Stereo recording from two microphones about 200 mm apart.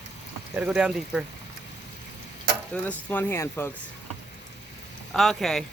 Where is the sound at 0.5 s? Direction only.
5° right (ahead or behind).